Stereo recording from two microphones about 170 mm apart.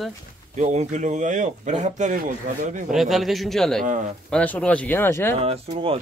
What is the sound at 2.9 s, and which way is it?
Speech, centre (ahead or behind).